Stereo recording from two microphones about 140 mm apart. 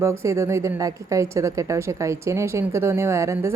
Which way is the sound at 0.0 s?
20° right (ahead or behind).